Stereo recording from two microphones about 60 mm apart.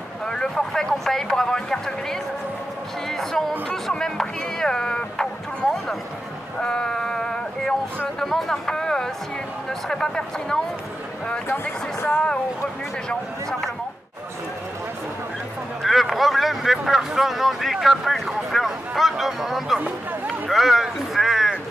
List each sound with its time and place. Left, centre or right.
0.3 s speech: centre
6.6 s a sound: centre
8.2 s speech: centre
11.4 s speech: left
13.1 s speech: centre
15.8 s speech: centre
20.2 s a sound: centre